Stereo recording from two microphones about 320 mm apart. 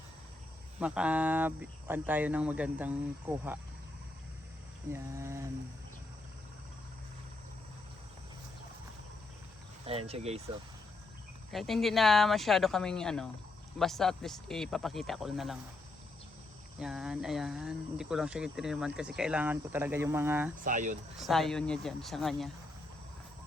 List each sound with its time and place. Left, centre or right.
0.8 s speech: centre
4.9 s a sound: centre
10.1 s speech: centre
11.5 s speech: centre
16.8 s speech: centre
20.7 s speech: right
21.2 s speech: centre